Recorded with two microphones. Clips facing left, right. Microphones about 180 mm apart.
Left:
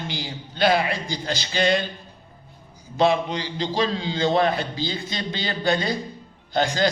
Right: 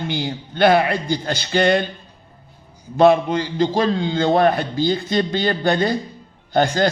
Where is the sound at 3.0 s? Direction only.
50° right (ahead or behind).